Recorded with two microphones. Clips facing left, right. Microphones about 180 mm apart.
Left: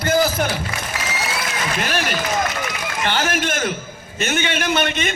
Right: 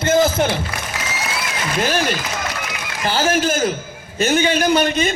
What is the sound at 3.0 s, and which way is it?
A man's voice, 30° right (ahead or behind).